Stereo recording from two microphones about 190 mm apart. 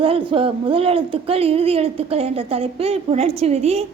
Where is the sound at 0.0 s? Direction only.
30° right (ahead or behind).